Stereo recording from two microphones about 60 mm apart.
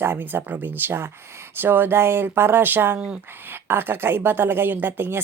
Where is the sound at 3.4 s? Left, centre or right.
Right.